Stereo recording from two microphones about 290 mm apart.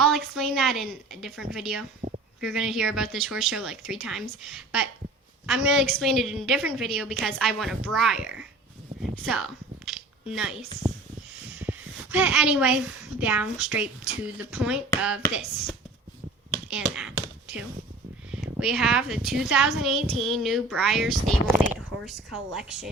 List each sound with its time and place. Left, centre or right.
0.0 s a woman's voice: centre
2.0 s a sound: right
2.4 s a woman's voice: centre
9.1 s a sound: centre
12.1 s a woman's voice: centre
16.6 s a woman's voice: centre